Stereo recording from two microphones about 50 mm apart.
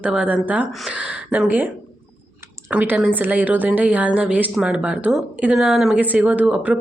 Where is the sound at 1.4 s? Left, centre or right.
Right.